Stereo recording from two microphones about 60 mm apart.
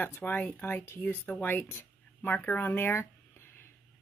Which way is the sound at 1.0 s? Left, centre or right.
Left.